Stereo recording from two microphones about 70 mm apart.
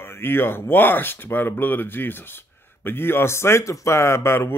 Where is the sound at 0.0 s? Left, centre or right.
Left.